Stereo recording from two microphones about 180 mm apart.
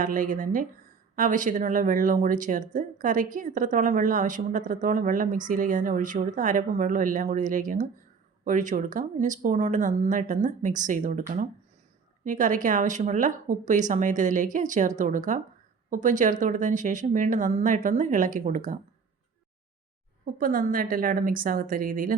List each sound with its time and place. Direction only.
0.0 s speech: 50° right (ahead or behind)
20.2 s speech: 50° right (ahead or behind)